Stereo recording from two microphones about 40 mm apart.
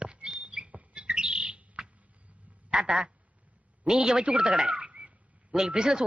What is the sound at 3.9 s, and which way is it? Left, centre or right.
Speech, centre.